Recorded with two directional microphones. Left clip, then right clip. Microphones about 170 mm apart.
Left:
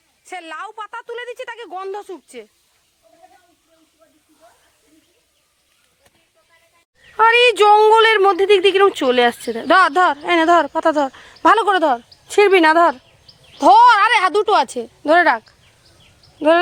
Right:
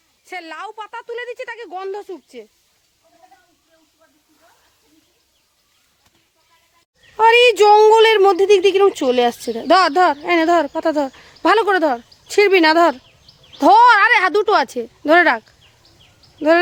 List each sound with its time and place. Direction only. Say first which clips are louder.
0.3 s a woman's voice: right 1 dB; 25° right (ahead or behind)
0.5 s speech: left 3 dB; 5° right (ahead or behind)
1.7 s a woman's voice: even; 15° right (ahead or behind)
7.2 s a woman's voice: right 1 dB; 10° right (ahead or behind)
13.7 s speech: even; 40° right (ahead or behind)
14.4 s speech: even; 25° right (ahead or behind)